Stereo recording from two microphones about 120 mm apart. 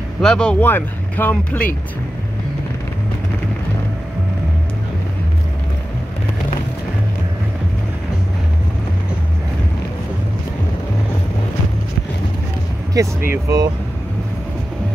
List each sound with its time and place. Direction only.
0.2 s speech: 5° left (ahead or behind)
12.9 s speech: 30° right (ahead or behind)